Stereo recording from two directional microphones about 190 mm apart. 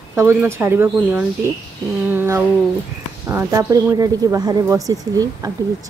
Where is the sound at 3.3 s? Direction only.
15° right (ahead or behind).